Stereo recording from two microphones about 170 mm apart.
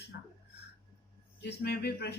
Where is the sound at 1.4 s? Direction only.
70° left (ahead or behind).